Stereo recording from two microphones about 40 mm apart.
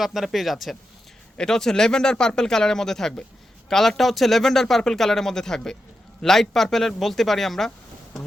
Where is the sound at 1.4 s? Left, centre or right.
Centre.